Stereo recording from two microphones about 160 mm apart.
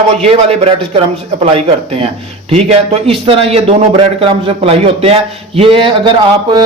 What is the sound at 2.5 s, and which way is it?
Speech, 40° right (ahead or behind).